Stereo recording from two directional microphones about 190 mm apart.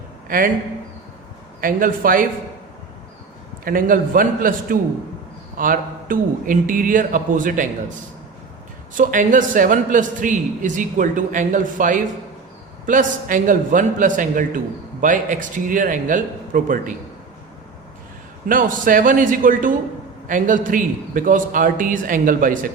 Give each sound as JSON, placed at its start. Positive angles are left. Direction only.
{"t": 0.3, "sound": "a man's voice", "side_deg": -45}
{"t": 1.6, "sound": "a man's voice", "side_deg": -45}
{"t": 3.6, "sound": "a man's voice", "side_deg": -50}
{"t": 9.0, "sound": "a man's voice", "side_deg": -45}
{"t": 18.4, "sound": "a man's voice", "side_deg": -45}